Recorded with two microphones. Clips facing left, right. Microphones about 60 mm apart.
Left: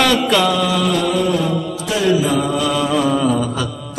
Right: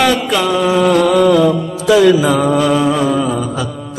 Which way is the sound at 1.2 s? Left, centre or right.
Right.